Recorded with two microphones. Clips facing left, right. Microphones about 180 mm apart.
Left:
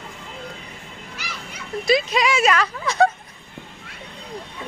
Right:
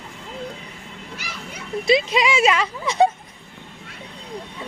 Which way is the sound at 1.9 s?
25° right (ahead or behind).